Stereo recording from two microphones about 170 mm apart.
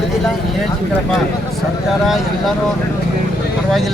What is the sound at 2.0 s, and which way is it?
Speech, centre (ahead or behind).